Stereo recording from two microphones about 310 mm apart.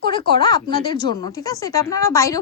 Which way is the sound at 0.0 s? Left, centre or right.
Centre.